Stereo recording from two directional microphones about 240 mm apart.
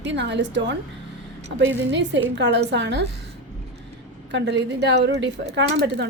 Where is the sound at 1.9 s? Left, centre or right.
Right.